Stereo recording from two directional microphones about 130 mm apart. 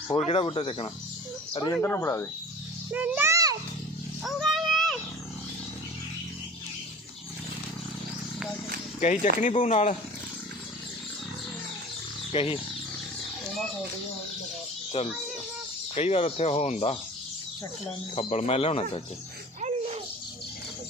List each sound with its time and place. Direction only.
0.3 s speech: 50° left (ahead or behind)
1.7 s speech: 20° left (ahead or behind)
2.9 s a child's voice: 15° right (ahead or behind)
4.2 s a sound: centre (ahead or behind)
9.0 s speech: 70° left (ahead or behind)
12.3 s speech: 45° left (ahead or behind)
15.0 s speech: 50° left (ahead or behind)
18.1 s speech: 50° left (ahead or behind)
19.6 s music: 55° right (ahead or behind)